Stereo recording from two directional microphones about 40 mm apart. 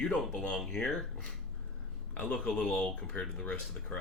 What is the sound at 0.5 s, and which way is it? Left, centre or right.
Speech, centre.